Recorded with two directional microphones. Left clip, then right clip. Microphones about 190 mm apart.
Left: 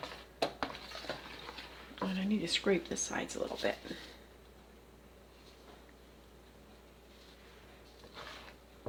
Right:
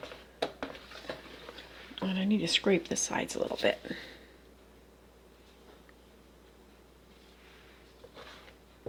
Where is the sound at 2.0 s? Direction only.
45° right (ahead or behind).